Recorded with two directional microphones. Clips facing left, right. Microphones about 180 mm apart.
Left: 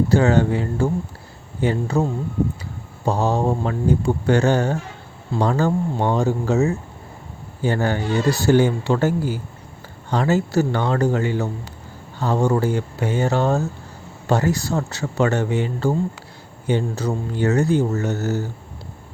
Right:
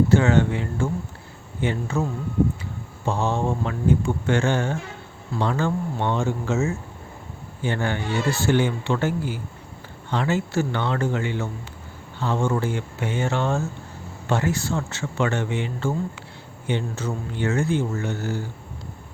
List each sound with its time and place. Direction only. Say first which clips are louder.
0.1 s speech: left 2 dB; 35° left (ahead or behind)
3.1 s speech: left 4 dB; 40° left (ahead or behind)